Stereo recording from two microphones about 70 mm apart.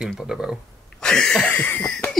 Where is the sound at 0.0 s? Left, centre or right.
Centre.